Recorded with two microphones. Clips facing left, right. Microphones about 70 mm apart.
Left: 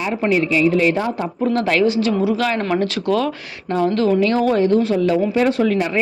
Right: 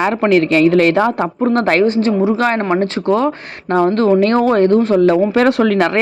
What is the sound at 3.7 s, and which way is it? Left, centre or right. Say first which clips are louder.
Speech: right 5 dB; right.